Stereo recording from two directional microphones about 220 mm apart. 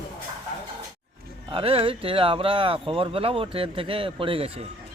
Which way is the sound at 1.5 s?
25° right (ahead or behind).